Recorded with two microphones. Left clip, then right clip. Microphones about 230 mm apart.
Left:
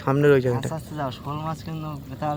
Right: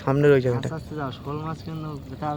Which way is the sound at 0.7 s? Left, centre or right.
Left.